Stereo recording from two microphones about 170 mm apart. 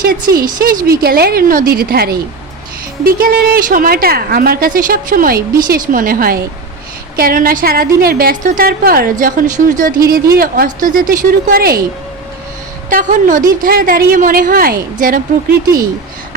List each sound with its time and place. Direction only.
0.0 s a woman's voice: 60° right (ahead or behind)
12.9 s a woman's voice: 50° right (ahead or behind)